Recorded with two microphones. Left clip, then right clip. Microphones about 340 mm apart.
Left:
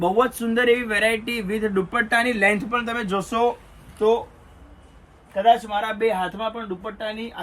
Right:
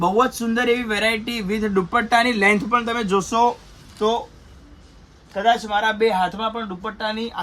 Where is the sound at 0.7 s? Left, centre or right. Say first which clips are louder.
Even; right.